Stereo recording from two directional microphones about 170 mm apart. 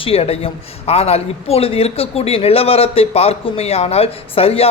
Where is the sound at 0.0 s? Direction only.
35° left (ahead or behind).